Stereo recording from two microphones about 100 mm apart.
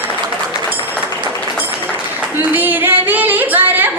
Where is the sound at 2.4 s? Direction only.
20° right (ahead or behind).